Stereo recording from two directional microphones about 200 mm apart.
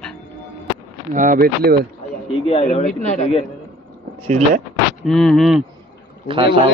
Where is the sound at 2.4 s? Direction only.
30° left (ahead or behind).